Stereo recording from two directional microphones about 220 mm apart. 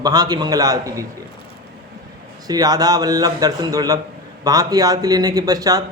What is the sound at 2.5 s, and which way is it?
Speech, 15° right (ahead or behind).